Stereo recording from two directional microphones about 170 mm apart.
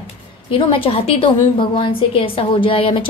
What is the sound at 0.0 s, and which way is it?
Speech, 30° left (ahead or behind).